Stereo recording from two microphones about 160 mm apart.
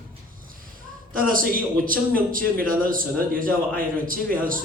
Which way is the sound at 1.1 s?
60° right (ahead or behind).